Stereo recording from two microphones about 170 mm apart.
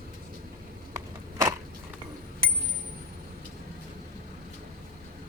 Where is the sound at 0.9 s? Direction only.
20° right (ahead or behind).